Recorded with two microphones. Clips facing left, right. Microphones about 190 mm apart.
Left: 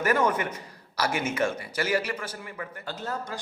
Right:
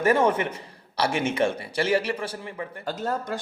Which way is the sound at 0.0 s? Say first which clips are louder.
Right 4 dB; 30° right (ahead or behind).